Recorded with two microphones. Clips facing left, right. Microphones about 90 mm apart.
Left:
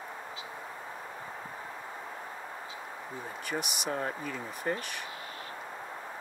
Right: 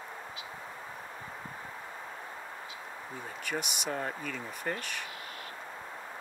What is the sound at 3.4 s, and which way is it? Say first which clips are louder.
Speech: left 1 dB; centre (ahead or behind).